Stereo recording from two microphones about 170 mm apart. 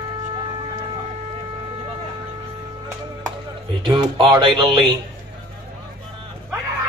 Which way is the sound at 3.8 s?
30° right (ahead or behind).